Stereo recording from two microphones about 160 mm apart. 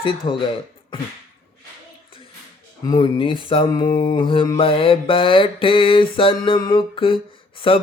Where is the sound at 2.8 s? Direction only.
25° left (ahead or behind).